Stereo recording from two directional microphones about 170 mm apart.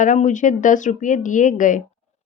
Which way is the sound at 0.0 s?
45° left (ahead or behind).